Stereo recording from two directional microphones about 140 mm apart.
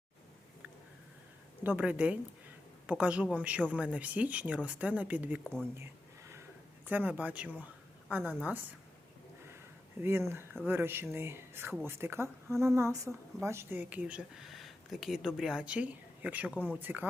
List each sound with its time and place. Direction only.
1.6 s speech: 10° right (ahead or behind)
5.4 s speech: 5° left (ahead or behind)
5.7 s a sound: 20° right (ahead or behind)
6.8 s speech: 10° right (ahead or behind)
10.0 s speech: 15° right (ahead or behind)